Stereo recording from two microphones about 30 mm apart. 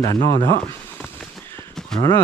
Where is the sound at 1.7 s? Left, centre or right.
Centre.